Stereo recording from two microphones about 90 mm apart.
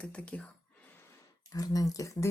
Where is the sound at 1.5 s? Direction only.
40° left (ahead or behind).